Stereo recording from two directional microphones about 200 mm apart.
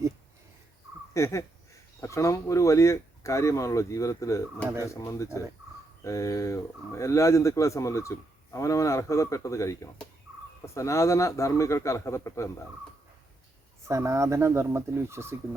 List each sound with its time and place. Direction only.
1.1 s speech: 15° left (ahead or behind)
13.8 s speech: 15° right (ahead or behind)